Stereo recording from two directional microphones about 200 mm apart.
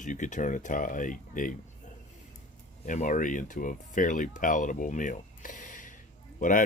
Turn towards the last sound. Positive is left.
turn(degrees=40)  # may be behind; listen again after turning